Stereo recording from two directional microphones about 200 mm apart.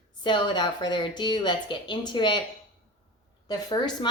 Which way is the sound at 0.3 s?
25° left (ahead or behind).